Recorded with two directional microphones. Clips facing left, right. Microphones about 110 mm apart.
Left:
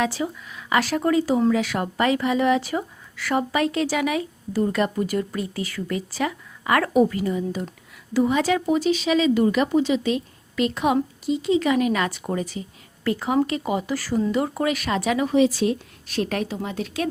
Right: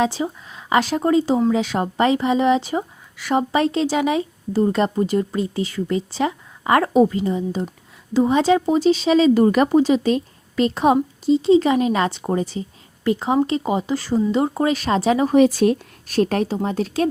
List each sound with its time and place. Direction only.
0.0 s speech: 25° right (ahead or behind)
15.3 s speech: 55° right (ahead or behind); by 17.1 s 35° right (ahead or behind)